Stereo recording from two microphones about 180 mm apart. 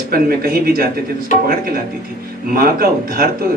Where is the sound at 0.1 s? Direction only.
55° right (ahead or behind).